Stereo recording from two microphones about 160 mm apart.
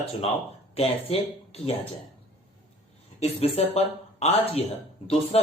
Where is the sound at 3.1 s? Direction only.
40° left (ahead or behind).